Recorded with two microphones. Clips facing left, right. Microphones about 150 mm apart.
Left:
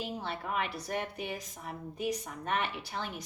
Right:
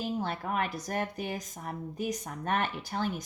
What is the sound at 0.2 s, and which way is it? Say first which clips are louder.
A woman's voice: right 3 dB; 45° right (ahead or behind).